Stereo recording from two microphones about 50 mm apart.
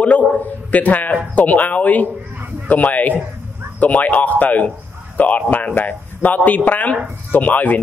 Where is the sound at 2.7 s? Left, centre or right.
Left.